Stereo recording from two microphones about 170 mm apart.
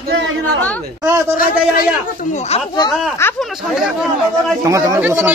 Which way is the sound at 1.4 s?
60° left (ahead or behind).